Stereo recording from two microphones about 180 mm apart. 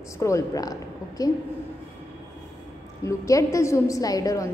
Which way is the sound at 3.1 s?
15° left (ahead or behind).